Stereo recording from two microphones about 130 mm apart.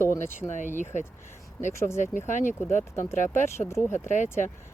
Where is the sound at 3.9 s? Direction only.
65° left (ahead or behind).